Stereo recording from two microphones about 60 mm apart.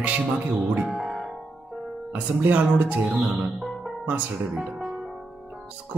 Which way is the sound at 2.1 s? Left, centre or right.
Right.